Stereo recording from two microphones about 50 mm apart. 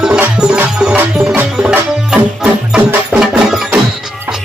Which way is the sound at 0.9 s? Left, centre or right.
Right.